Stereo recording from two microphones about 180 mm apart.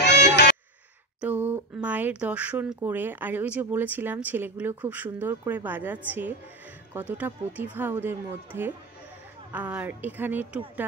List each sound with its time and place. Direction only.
0.0 s music: 70° left (ahead or behind)
1.2 s speech: 10° right (ahead or behind)